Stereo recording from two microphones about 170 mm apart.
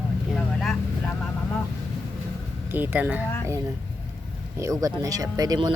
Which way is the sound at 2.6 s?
10° right (ahead or behind).